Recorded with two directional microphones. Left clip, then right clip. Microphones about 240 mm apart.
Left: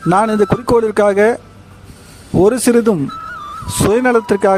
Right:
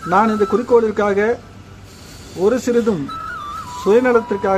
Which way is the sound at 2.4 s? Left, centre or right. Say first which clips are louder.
Left 4 dB; left.